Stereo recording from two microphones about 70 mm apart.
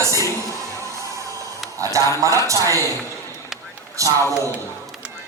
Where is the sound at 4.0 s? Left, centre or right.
Right.